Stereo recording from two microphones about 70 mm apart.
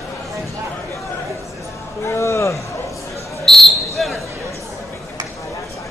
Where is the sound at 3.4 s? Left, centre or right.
Centre.